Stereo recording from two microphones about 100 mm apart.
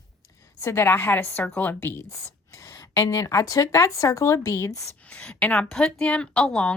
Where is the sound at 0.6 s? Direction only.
25° left (ahead or behind).